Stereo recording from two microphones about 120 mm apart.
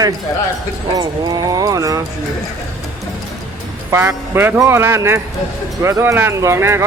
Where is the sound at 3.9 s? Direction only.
20° right (ahead or behind).